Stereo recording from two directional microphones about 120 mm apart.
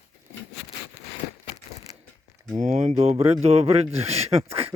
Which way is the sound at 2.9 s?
60° right (ahead or behind).